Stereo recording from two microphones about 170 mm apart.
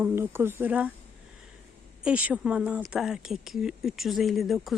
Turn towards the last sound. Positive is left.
turn(degrees=0)  # may be behind; listen again after turning